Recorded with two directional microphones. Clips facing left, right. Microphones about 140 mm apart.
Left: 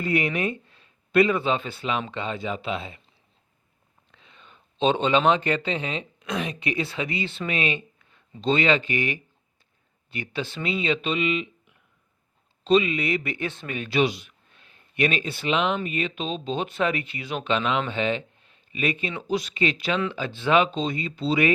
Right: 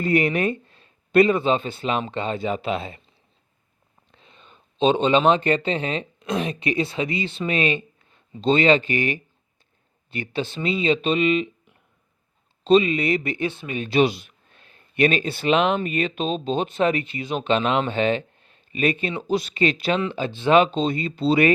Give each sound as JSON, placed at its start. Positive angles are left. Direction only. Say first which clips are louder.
{"t": 0.0, "sound": "speech", "louder": "right 4 dB", "side_deg": -45}
{"t": 0.8, "sound": "a man's voice", "louder": "right 3 dB", "side_deg": -30}
{"t": 4.1, "sound": "a sound", "louder": "right 2 dB", "side_deg": -30}
{"t": 5.5, "sound": "speech", "louder": "right 4 dB", "side_deg": -30}
{"t": 5.8, "sound": "speech", "louder": "right 4 dB", "side_deg": -40}
{"t": 6.2, "sound": "speech", "louder": "right 4 dB", "side_deg": -30}
{"t": 7.4, "sound": "speech", "louder": "right 5 dB", "side_deg": -30}
{"t": 10.1, "sound": "speech", "louder": "right 4 dB", "side_deg": -25}
{"t": 13.5, "sound": "speech", "louder": "right 2 dB", "side_deg": -10}
{"t": 13.7, "sound": "speech", "louder": "right 4 dB", "side_deg": -25}
{"t": 15.4, "sound": "speech", "louder": "right 5 dB", "side_deg": -45}
{"t": 20.5, "sound": "speech", "louder": "right 4 dB", "side_deg": -35}